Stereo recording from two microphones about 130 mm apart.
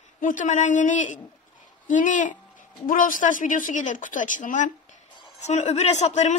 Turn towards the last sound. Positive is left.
turn(degrees=60)  # may be behind; listen again after turning